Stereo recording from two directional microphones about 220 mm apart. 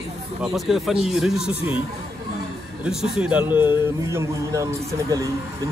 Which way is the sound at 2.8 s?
5° right (ahead or behind).